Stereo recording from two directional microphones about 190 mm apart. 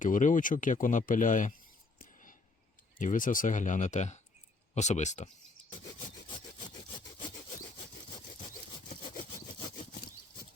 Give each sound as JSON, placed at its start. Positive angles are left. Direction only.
{"t": 0.0, "sound": "speech", "side_deg": 40}
{"t": 3.0, "sound": "speech", "side_deg": 45}